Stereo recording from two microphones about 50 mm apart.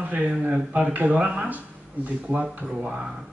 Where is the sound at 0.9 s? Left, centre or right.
Right.